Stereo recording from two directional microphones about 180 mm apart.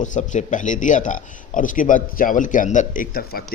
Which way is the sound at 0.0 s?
45° left (ahead or behind).